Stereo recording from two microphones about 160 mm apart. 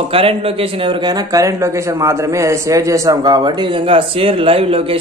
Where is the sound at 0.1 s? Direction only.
35° right (ahead or behind).